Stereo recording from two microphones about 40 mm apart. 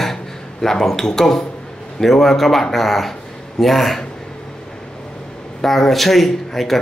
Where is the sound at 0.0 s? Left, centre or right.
Centre.